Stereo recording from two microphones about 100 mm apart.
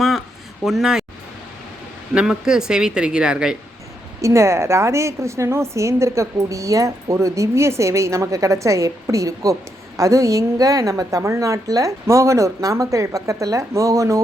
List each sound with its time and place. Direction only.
0.0 s a sound: centre (ahead or behind)
2.1 s speech: 5° right (ahead or behind)
4.2 s a woman's voice: 30° right (ahead or behind)